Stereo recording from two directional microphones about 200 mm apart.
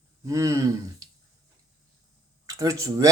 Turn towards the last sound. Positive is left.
turn(degrees=-15)  # may be behind; listen again after turning